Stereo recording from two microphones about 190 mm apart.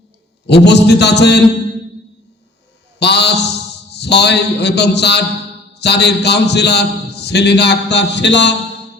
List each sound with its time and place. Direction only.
0.4 s a man's voice: 65° left (ahead or behind)
3.0 s a sound: 60° left (ahead or behind)
3.9 s a man's voice: 60° left (ahead or behind)